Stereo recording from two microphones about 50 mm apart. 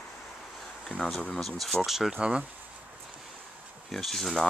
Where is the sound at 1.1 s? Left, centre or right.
Left.